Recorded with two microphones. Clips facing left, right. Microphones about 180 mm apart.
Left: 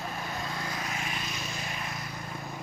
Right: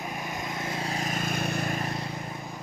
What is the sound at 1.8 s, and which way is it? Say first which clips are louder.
Vehicle: right 6 dB; 30° right (ahead or behind).